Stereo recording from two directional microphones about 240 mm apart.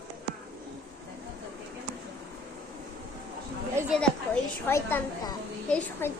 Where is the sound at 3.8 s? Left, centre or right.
Centre.